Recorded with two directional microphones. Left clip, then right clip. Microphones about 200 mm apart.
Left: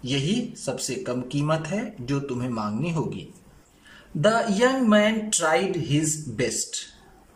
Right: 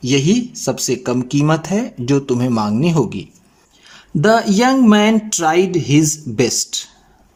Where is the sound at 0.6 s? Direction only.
60° right (ahead or behind).